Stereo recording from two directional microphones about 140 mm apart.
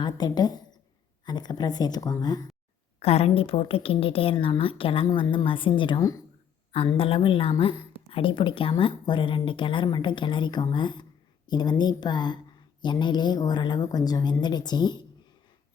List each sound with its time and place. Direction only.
0.0 s speech: 30° left (ahead or behind)
3.0 s a woman's voice: 45° left (ahead or behind); by 15.0 s 30° left (ahead or behind)